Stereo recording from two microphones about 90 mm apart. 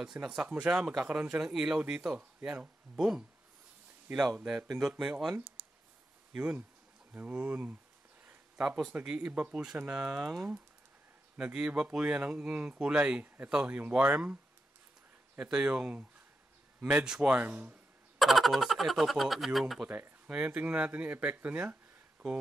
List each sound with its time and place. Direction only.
0.0 s speech: 5° right (ahead or behind)
5.6 s clicking: 15° right (ahead or behind)
6.3 s speech: 10° right (ahead or behind)
8.5 s speech: 10° right (ahead or behind)
18.2 s speech: centre (ahead or behind); by 21.7 s 15° right (ahead or behind)